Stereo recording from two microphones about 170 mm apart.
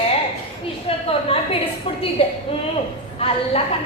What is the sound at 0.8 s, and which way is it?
A woman's voice, 35° left (ahead or behind).